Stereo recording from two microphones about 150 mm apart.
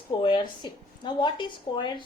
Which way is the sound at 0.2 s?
35° left (ahead or behind).